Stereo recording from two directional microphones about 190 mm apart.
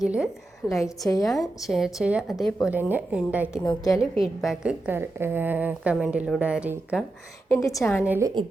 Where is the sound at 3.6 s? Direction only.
20° left (ahead or behind).